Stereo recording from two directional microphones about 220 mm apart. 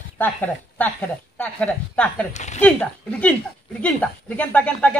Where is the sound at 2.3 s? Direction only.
30° left (ahead or behind).